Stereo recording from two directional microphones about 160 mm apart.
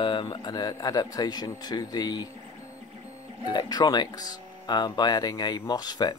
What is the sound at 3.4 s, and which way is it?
Speech, 25° left (ahead or behind).